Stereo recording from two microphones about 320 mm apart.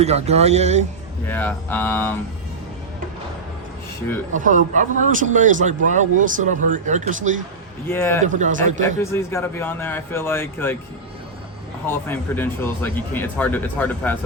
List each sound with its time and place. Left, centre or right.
0.0 s a man's voice: centre
1.3 s speech: centre
4.4 s a man's voice: right
7.9 s speech: centre
8.3 s a man's voice: right
8.8 s speech: centre
11.9 s speech: centre